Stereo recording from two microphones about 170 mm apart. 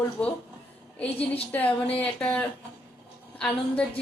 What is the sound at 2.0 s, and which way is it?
A woman's voice, 10° left (ahead or behind).